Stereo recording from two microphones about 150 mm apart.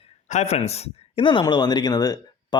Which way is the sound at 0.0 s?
50° left (ahead or behind).